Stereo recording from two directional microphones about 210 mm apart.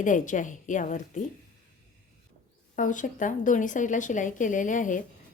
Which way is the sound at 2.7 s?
40° left (ahead or behind).